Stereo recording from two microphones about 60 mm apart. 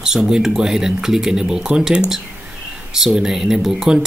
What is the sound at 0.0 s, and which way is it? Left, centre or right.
Speech, centre.